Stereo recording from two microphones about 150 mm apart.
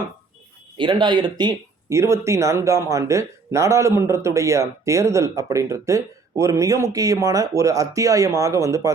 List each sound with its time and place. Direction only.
0.8 s speech: 30° right (ahead or behind)